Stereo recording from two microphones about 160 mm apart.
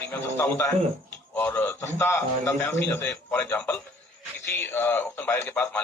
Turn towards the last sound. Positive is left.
turn(degrees=15)  # may be behind; listen again after turning